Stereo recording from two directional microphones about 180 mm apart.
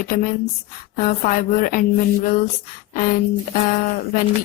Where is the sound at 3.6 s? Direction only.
45° left (ahead or behind).